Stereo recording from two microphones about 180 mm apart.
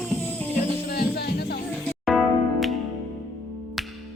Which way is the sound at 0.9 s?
60° left (ahead or behind).